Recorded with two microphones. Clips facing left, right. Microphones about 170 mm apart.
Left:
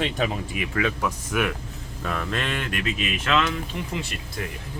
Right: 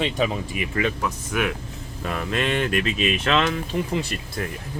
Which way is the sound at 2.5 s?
30° right (ahead or behind).